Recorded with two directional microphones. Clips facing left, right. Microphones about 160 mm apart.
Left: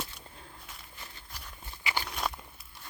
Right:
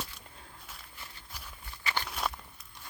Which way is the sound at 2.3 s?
5° left (ahead or behind).